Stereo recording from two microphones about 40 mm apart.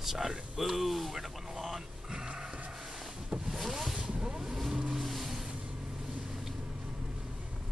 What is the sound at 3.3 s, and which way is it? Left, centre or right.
Vehicle, centre.